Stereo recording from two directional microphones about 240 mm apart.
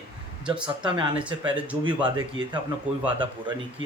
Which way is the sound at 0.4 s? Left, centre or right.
Centre.